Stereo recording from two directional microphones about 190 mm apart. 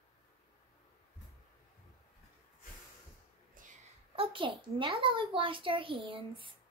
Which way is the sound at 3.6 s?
45° right (ahead or behind).